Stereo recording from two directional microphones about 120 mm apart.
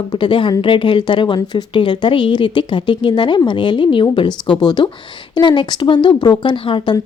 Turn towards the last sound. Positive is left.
turn(degrees=45)  # may be behind; listen again after turning